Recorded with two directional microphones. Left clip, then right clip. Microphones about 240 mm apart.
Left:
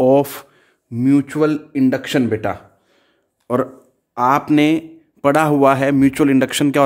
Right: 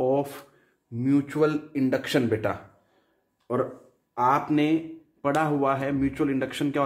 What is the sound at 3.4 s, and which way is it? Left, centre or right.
A man's voice, left.